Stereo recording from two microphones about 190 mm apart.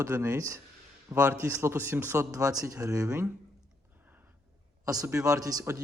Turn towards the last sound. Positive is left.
turn(degrees=-15)  # may be behind; listen again after turning